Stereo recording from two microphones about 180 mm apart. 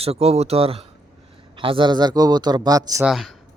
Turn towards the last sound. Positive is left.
turn(degrees=0)  # may be behind; listen again after turning